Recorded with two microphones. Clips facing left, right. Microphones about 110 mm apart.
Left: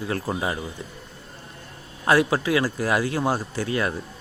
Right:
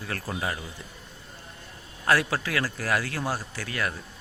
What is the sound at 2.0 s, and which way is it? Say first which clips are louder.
Speech: left 5 dB; 20° left (ahead or behind).